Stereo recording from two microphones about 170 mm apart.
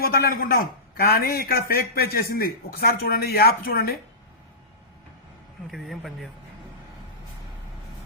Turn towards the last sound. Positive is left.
turn(degrees=0)  # may be behind; listen again after turning